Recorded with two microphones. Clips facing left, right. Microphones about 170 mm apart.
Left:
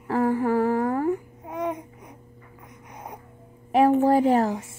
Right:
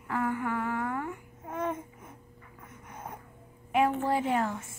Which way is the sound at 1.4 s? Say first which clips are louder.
Left 4 dB; 15° left (ahead or behind).